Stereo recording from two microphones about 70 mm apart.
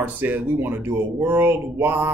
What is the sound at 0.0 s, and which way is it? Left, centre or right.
Speech, right.